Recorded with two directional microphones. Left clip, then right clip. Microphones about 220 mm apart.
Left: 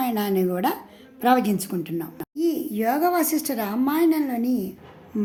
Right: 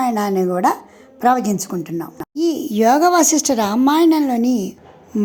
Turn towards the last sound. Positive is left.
turn(degrees=-35)  # may be behind; listen again after turning